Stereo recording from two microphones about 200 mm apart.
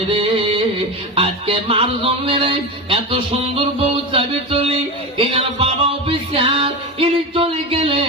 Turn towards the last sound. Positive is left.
turn(degrees=-25)  # may be behind; listen again after turning